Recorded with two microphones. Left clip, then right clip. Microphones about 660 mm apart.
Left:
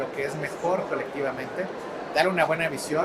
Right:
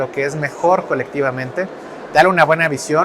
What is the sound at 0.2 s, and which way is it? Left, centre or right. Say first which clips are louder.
Speech: right 11 dB; right.